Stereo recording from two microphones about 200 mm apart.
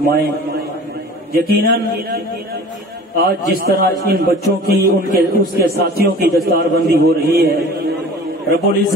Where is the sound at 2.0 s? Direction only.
50° right (ahead or behind).